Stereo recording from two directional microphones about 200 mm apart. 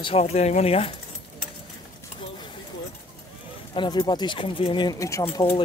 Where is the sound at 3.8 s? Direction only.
20° left (ahead or behind).